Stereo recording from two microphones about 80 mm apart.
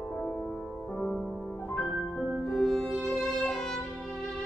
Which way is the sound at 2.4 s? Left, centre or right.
Centre.